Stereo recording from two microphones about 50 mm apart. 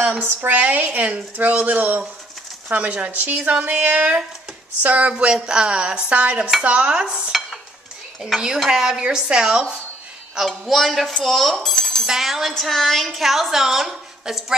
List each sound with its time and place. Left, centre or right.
0.5 s a woman's voice: right
5.1 s a woman's voice: centre
10.6 s a woman's voice: centre
12.1 s a woman's voice: centre
12.5 s a woman's voice: centre